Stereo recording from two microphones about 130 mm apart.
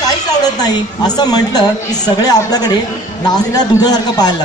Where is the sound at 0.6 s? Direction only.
30° left (ahead or behind).